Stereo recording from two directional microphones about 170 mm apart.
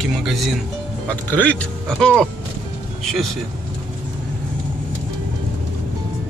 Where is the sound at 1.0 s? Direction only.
10° left (ahead or behind).